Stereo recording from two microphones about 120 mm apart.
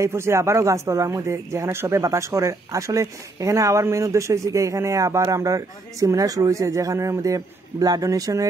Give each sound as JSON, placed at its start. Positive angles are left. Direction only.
{"t": 0.0, "sound": "speech", "side_deg": -20}